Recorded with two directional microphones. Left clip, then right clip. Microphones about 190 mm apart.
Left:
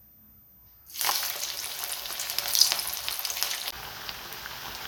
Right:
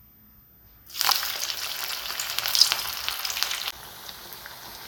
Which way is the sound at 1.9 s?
10° left (ahead or behind).